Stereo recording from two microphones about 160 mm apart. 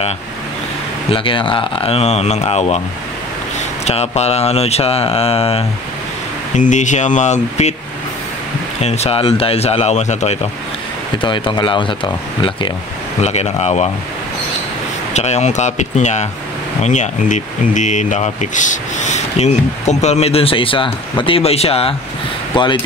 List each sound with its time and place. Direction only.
1.1 s speech: 35° left (ahead or behind)
3.8 s speech: 40° left (ahead or behind)
6.5 s speech: 50° left (ahead or behind)
8.8 s speech: 40° left (ahead or behind)
11.1 s speech: 30° left (ahead or behind)
13.2 s speech: 45° left (ahead or behind)
15.1 s speech: 45° left (ahead or behind); by 22.7 s 30° left (ahead or behind)